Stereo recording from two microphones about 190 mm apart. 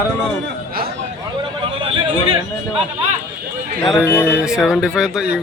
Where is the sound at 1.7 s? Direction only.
25° right (ahead or behind).